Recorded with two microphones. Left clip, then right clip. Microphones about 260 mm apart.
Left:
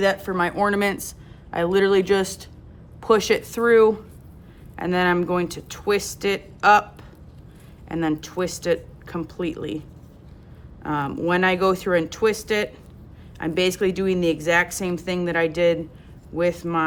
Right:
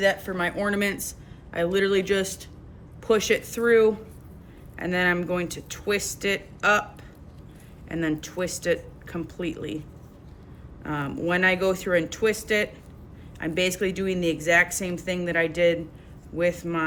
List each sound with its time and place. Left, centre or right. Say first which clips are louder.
0.0 s speech: left 3 dB; centre
7.9 s speech: left 3 dB; centre
10.8 s speech: left 4 dB; centre